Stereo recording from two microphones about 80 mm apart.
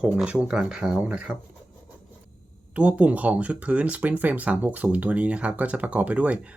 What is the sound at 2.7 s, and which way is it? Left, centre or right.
Speech, centre.